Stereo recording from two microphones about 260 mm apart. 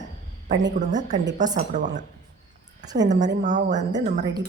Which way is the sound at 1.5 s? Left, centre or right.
Right.